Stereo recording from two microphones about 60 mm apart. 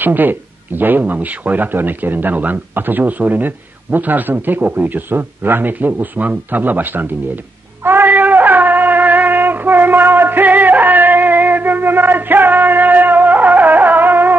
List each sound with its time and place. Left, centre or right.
0.0 s speech: right
7.8 s shofar: right